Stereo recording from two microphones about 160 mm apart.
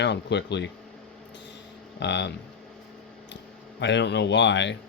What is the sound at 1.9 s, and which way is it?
Speech, 90° left.